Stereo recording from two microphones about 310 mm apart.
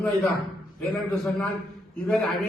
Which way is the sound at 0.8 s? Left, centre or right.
Centre.